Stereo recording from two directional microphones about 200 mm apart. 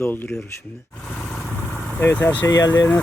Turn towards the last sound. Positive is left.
turn(degrees=10)  # may be behind; listen again after turning